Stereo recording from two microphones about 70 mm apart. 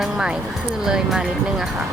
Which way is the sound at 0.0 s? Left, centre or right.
Centre.